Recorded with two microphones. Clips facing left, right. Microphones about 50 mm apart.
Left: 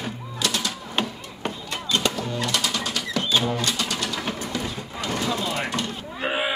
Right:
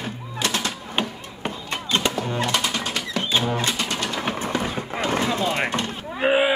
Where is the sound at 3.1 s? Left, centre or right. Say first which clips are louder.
Even; right.